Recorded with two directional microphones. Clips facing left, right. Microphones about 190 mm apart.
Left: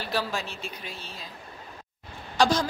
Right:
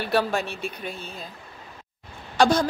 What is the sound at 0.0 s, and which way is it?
Speech, 60° right (ahead or behind).